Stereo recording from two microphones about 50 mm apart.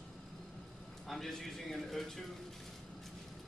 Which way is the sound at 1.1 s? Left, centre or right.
Centre.